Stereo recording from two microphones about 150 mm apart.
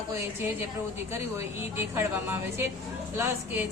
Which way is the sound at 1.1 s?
15° right (ahead or behind).